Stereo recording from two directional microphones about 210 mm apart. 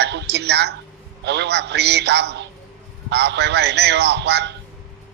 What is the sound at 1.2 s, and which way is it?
A man's voice, 55° right (ahead or behind).